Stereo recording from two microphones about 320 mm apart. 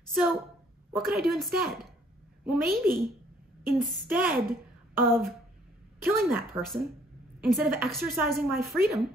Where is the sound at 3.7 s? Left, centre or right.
Centre.